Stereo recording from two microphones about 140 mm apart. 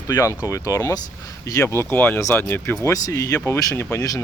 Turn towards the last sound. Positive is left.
turn(degrees=20)  # may be behind; listen again after turning